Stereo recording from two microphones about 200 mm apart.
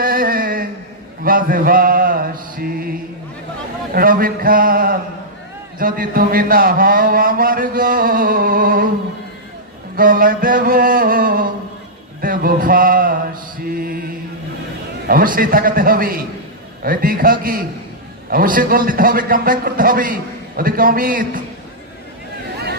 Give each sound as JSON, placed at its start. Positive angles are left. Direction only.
{"t": 0.0, "sound": "a sound", "side_deg": -45}
{"t": 1.2, "sound": "mantra", "side_deg": -45}
{"t": 3.9, "sound": "a man's voice", "side_deg": -45}
{"t": 9.9, "sound": "a man's voice", "side_deg": -45}
{"t": 12.2, "sound": "a sound", "side_deg": -45}
{"t": 13.7, "sound": "mantra", "side_deg": -45}
{"t": 15.0, "sound": "a man's voice", "side_deg": -45}